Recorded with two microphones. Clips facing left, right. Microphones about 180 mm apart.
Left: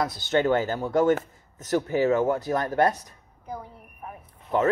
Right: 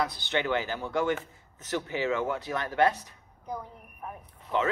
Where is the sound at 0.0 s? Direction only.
40° left (ahead or behind).